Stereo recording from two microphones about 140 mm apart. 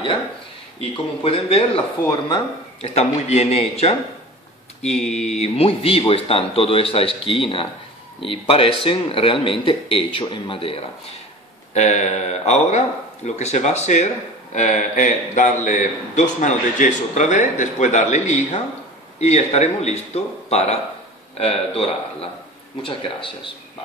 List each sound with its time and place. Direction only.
1.2 s speech: 45° left (ahead or behind)
2.0 s speech: 30° left (ahead or behind)
2.8 s speech: 50° left (ahead or behind)
5.1 s speech: 50° left (ahead or behind)
11.7 s speech: 55° left (ahead or behind); by 23.5 s 40° left (ahead or behind)